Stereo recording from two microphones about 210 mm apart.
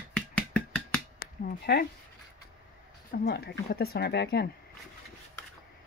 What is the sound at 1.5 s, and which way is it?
Speech, 45° left (ahead or behind).